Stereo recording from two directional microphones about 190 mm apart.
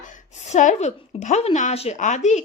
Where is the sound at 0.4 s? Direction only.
40° left (ahead or behind).